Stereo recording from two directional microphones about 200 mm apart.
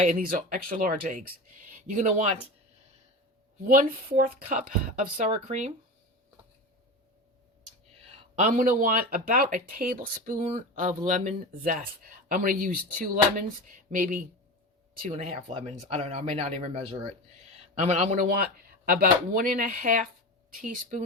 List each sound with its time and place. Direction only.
0.0 s speech: 40° right (ahead or behind)
3.7 s speech: 45° right (ahead or behind)
8.4 s speech: 40° right (ahead or behind)
13.9 s speech: 40° right (ahead or behind)
15.1 s speech: 30° right (ahead or behind)